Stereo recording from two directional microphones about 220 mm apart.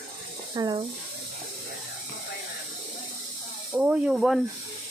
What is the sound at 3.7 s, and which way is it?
Speech, 5° right (ahead or behind).